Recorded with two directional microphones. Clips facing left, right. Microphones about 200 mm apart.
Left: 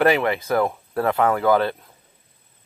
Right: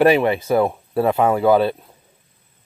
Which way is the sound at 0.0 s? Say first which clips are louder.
Right 4 dB; 15° right (ahead or behind).